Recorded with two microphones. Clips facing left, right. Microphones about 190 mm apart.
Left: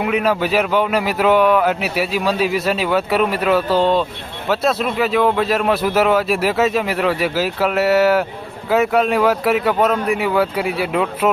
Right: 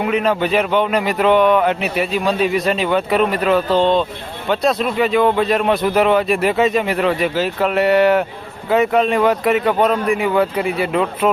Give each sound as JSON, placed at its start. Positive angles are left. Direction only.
{"t": 0.0, "sound": "speech", "side_deg": 5}